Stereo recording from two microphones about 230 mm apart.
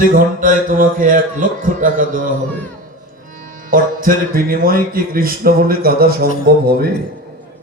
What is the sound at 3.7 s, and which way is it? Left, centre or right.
Speech, right.